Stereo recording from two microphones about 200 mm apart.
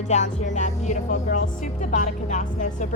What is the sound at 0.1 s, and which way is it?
Music, 35° left (ahead or behind).